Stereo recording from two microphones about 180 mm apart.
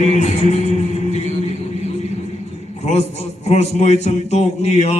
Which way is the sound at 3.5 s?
40° left (ahead or behind).